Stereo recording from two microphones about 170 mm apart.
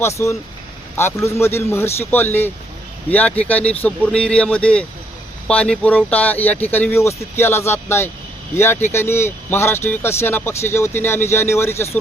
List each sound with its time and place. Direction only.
0.0 s speech: 15° left (ahead or behind)